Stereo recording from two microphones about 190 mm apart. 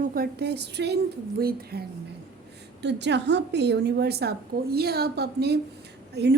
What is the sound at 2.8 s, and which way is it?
A woman's voice, 65° right (ahead or behind).